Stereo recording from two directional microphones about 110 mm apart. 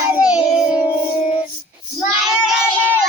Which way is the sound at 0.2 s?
10° right (ahead or behind).